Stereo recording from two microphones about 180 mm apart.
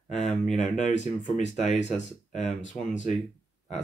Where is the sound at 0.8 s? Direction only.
40° left (ahead or behind).